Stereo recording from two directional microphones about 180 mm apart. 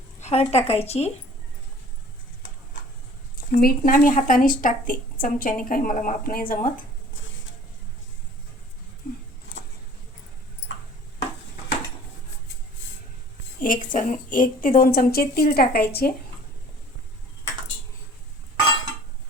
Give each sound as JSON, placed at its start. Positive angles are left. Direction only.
{"t": 0.2, "sound": "speech", "side_deg": 35}
{"t": 3.3, "sound": "speech", "side_deg": 50}
{"t": 13.6, "sound": "a woman's voice", "side_deg": 50}